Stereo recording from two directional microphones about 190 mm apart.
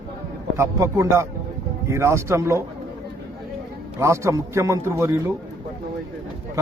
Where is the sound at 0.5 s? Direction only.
15° right (ahead or behind).